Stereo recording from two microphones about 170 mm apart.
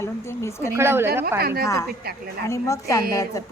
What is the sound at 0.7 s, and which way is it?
Speech, 15° right (ahead or behind).